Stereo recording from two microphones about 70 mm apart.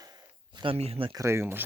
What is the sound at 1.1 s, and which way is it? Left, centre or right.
Speech, right.